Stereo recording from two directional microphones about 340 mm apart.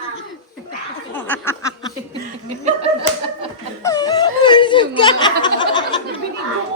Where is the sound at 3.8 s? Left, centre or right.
Centre.